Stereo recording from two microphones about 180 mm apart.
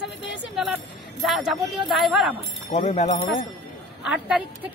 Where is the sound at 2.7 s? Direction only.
40° left (ahead or behind).